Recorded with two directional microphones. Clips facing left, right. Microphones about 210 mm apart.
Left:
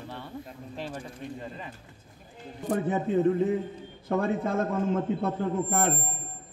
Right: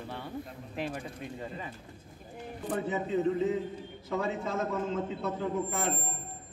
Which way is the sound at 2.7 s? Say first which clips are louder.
Left 5 dB; 50° left (ahead or behind).